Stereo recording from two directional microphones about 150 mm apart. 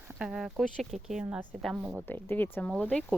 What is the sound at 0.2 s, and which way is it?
A woman's voice, 5° right (ahead or behind).